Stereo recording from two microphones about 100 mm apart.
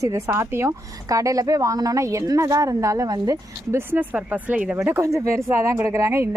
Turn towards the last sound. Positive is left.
turn(degrees=-30)  # may be behind; listen again after turning